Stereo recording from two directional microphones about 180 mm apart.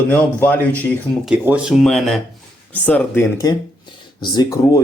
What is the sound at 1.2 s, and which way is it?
Speech, 5° right (ahead or behind).